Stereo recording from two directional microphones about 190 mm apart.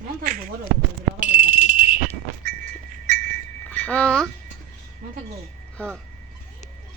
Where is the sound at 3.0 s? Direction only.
45° right (ahead or behind).